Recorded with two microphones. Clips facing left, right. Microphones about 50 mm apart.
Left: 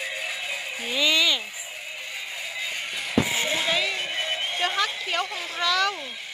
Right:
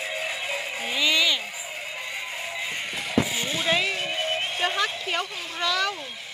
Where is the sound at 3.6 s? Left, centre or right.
Centre.